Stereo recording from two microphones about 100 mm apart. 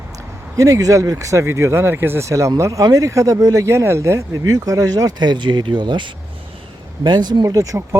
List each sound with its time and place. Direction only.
0.5 s speech: 35° right (ahead or behind)
7.4 s speech: 35° right (ahead or behind)